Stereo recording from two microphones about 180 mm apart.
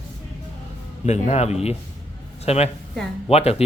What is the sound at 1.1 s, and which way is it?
A man's voice, 40° left (ahead or behind).